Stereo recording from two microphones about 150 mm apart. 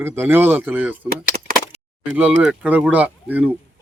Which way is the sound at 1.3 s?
45° right (ahead or behind).